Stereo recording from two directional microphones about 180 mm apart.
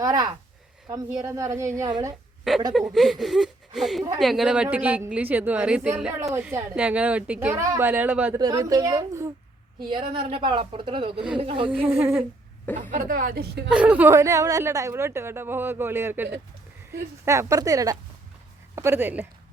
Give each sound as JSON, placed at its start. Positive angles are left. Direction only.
{"t": 0.0, "sound": "a woman's voice", "side_deg": -20}
{"t": 2.7, "sound": "a sound", "side_deg": 0}
{"t": 4.2, "sound": "a woman's voice", "side_deg": 0}
{"t": 8.4, "sound": "speech", "side_deg": -20}
{"t": 9.9, "sound": "speech", "side_deg": -30}
{"t": 11.9, "sound": "a woman's voice", "side_deg": -15}
{"t": 12.7, "sound": "a woman's voice", "side_deg": -45}
{"t": 13.7, "sound": "a woman's voice", "side_deg": -5}